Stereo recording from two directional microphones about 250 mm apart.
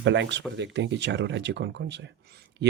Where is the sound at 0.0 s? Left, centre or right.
Right.